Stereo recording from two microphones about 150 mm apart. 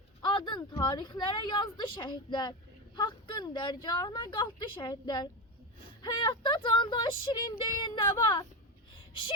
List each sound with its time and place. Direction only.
0.2 s a woman's voice: 30° left (ahead or behind)